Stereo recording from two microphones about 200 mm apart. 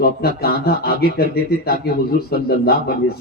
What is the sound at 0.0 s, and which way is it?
A man's voice, 50° left (ahead or behind).